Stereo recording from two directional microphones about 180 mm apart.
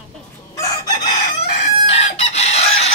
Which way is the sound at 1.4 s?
35° left (ahead or behind).